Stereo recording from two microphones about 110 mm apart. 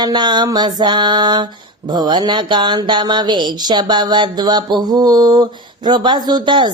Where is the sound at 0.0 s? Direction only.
40° right (ahead or behind).